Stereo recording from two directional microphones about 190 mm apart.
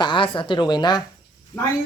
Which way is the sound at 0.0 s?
25° left (ahead or behind).